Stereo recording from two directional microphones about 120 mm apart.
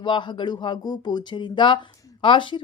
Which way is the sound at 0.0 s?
40° left (ahead or behind).